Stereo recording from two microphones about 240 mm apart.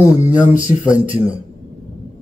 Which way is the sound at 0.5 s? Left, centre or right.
Centre.